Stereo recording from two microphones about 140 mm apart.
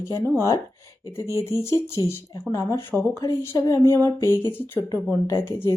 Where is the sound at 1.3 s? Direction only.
20° left (ahead or behind).